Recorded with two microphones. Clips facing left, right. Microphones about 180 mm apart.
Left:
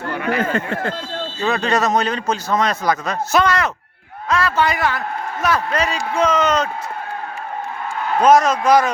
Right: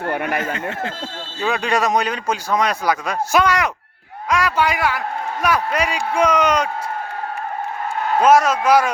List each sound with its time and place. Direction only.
0.4 s a sound: 55° left (ahead or behind)
1.5 s a man's voice: 10° right (ahead or behind)
8.2 s a man's voice: 10° right (ahead or behind)